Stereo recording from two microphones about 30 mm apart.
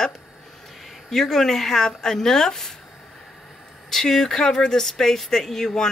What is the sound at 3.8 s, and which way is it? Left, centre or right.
Speech, centre.